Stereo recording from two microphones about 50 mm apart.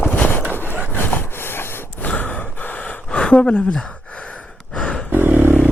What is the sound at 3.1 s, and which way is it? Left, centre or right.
Speech, left.